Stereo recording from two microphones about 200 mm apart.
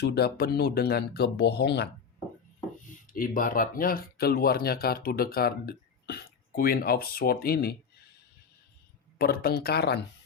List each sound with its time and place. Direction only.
0.0 s speech: 55° left (ahead or behind)
2.8 s speech: 40° left (ahead or behind)
9.1 s speech: 50° left (ahead or behind)